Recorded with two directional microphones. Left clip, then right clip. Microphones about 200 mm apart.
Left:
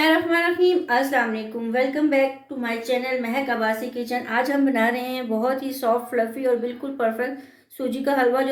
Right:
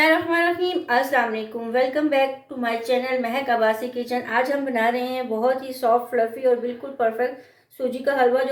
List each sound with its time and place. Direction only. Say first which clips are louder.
0.0 s a woman's voice: right 1 dB; 20° left (ahead or behind); by 6.5 s 35° left (ahead or behind)
7.9 s a woman's voice: right 1 dB; 35° left (ahead or behind)